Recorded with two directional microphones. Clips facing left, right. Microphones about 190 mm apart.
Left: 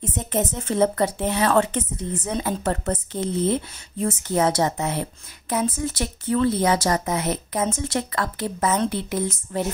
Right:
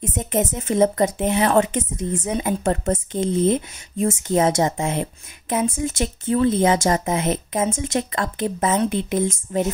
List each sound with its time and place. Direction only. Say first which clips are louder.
0.0 s speech: right 2 dB; 10° right (ahead or behind)
2.6 s speech: right 3 dB; 25° right (ahead or behind)
2.9 s speech: right 4 dB; 15° right (ahead or behind)